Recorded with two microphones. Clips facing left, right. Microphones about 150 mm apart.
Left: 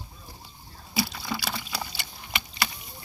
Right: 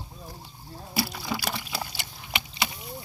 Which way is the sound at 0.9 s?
5° right (ahead or behind).